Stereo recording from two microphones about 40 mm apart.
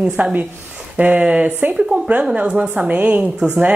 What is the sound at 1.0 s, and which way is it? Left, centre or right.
A woman's voice, right.